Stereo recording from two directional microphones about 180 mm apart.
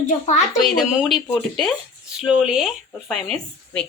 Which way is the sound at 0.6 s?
Centre (ahead or behind).